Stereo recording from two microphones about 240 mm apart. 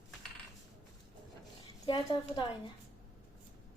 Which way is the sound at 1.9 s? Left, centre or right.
Centre.